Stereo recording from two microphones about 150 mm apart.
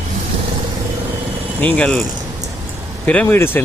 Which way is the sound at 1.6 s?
10° left (ahead or behind).